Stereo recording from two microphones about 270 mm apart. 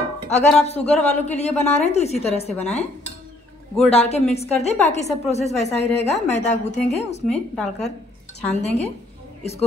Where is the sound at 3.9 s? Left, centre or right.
Left.